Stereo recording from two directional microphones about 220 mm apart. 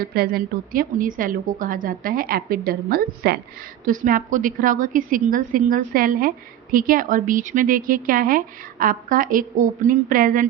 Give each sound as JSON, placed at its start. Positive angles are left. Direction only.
{"t": 0.0, "sound": "a woman's voice", "side_deg": -45}